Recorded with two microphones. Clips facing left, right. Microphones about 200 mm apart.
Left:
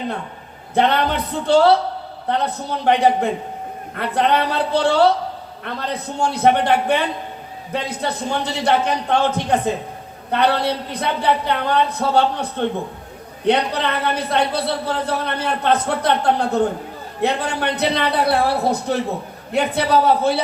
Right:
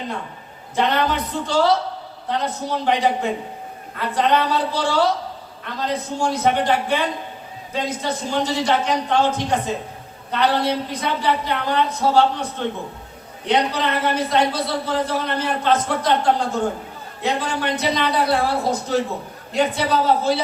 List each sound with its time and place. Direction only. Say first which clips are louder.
0.7 s a man's voice: left 2 dB; 60° left (ahead or behind)